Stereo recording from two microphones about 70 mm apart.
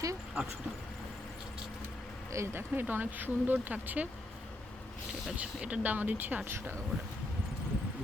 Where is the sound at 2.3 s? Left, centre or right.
Right.